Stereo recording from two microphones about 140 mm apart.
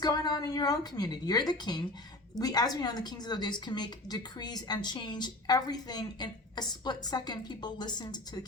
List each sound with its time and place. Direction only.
0.0 s a woman's voice: 30° left (ahead or behind)